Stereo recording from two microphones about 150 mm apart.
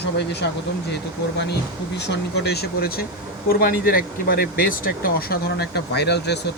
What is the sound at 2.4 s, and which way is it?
Speech, 90° left.